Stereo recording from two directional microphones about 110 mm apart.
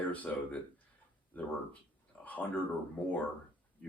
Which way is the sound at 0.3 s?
10° left (ahead or behind).